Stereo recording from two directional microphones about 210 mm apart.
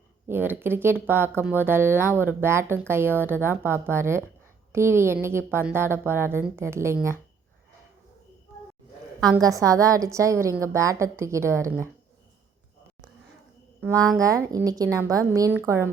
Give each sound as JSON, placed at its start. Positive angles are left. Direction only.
{"t": 0.3, "sound": "speech", "side_deg": -10}
{"t": 9.3, "sound": "speech", "side_deg": -15}
{"t": 13.8, "sound": "speech", "side_deg": -15}